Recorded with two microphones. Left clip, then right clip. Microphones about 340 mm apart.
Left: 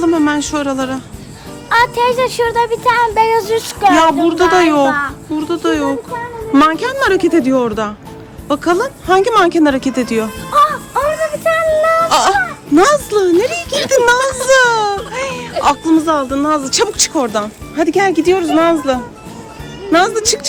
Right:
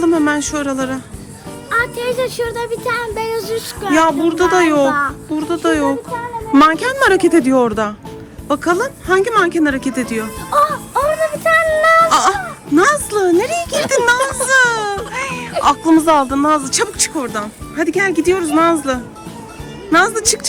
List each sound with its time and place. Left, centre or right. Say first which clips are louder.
0.0 s speech: left 1 dB; centre
1.7 s speech: left 6 dB; centre
3.8 s speech: left 4 dB; centre
10.5 s music: left 2 dB; centre
12.0 s speech: left 2 dB; centre